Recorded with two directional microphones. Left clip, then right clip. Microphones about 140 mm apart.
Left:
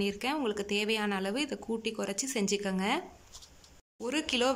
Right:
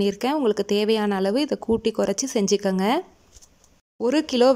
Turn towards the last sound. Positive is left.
turn(degrees=-45)  # may be behind; listen again after turning